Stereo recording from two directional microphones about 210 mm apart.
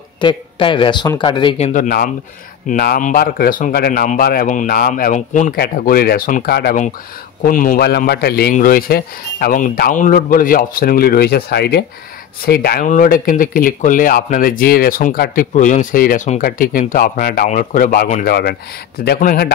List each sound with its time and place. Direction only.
0.2 s speech: 20° left (ahead or behind)
1.7 s a man's voice: 40° left (ahead or behind)